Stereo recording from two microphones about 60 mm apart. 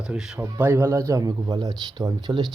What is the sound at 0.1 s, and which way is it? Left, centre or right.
Speech, centre.